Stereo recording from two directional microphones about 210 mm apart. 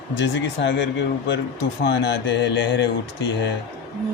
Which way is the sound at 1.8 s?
55° left (ahead or behind).